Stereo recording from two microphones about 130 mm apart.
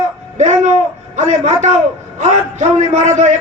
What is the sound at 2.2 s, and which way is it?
A man's voice, 70° right (ahead or behind).